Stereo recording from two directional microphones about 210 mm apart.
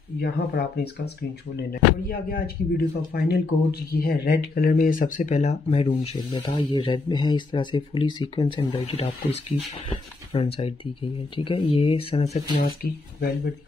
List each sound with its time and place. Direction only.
0.2 s speech: 50° left (ahead or behind)